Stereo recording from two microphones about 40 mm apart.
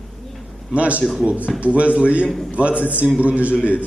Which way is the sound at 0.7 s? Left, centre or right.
Right.